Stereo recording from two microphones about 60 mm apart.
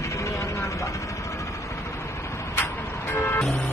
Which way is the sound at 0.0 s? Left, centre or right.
Left.